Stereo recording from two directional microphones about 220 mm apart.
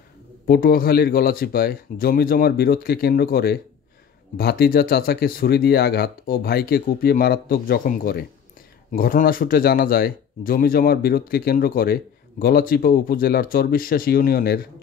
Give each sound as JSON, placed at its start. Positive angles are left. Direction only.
{"t": 0.5, "sound": "speech", "side_deg": 45}